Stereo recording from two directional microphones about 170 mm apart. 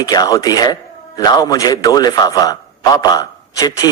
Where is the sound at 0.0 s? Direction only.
20° left (ahead or behind).